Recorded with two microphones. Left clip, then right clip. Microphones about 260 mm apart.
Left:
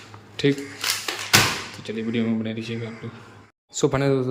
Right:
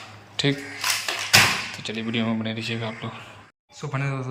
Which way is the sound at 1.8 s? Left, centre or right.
Centre.